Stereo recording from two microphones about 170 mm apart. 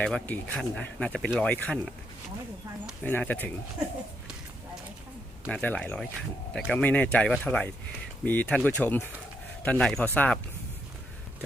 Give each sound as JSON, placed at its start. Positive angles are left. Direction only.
{"t": 0.0, "sound": "speech", "side_deg": 10}
{"t": 3.0, "sound": "speech", "side_deg": 10}
{"t": 5.5, "sound": "speech", "side_deg": 5}